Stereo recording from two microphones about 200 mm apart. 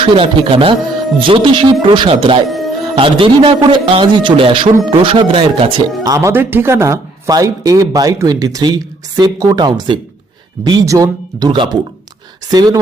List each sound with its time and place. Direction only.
0.0 s a man's voice: 25° right (ahead or behind)